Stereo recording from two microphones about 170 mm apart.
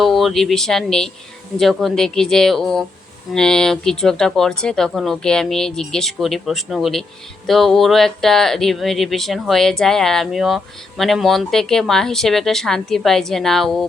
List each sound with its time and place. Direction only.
0.0 s speech: centre (ahead or behind)